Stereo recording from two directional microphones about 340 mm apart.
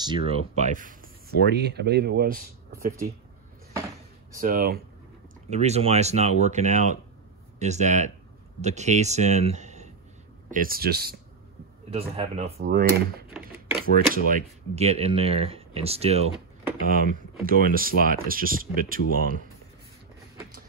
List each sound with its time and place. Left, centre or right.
0.0 s speech: centre
4.3 s speech: right